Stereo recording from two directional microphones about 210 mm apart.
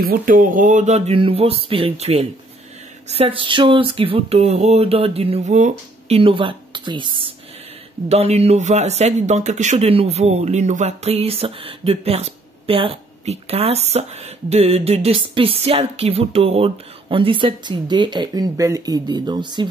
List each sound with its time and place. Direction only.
0.0 s speech: 40° right (ahead or behind); by 19.7 s 20° right (ahead or behind)